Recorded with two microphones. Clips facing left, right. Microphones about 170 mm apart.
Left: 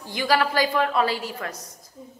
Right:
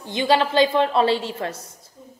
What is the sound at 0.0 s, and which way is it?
A woman's voice, 25° right (ahead or behind).